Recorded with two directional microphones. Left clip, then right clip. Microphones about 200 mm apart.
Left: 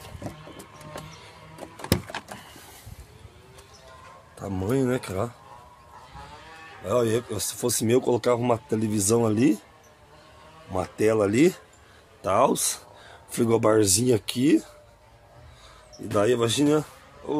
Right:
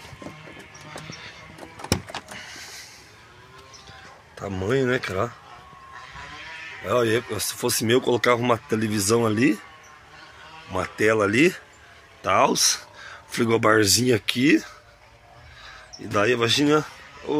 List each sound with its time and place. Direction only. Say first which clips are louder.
1.8 s a sound: right 1 dB; centre (ahead or behind)
2.3 s power windows: right 6 dB; 15° left (ahead or behind)
4.4 s speech: right 3 dB; 5° left (ahead or behind)
6.8 s speech: right 2 dB; 5° left (ahead or behind)
10.8 s speech: right 2 dB; 10° left (ahead or behind)
16.1 s speech: right 2 dB; 15° left (ahead or behind)